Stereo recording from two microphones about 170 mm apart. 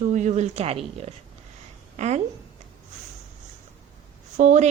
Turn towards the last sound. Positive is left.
turn(degrees=-45)  # may be behind; listen again after turning